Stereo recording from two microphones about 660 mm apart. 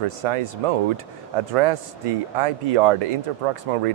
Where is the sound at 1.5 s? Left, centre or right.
Right.